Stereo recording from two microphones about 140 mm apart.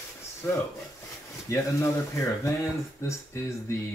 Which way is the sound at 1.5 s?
20° left (ahead or behind).